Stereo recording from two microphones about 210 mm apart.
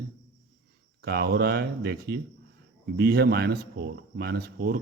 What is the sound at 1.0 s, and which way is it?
Speech, 50° right (ahead or behind).